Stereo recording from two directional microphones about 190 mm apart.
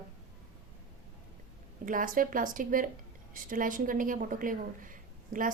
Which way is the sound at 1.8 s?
45° right (ahead or behind).